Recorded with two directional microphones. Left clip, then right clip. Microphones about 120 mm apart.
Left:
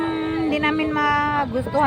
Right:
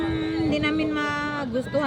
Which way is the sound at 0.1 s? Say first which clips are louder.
Left 2 dB; 30° right (ahead or behind).